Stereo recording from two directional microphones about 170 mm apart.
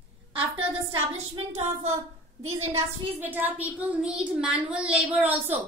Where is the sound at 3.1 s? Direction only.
10° right (ahead or behind).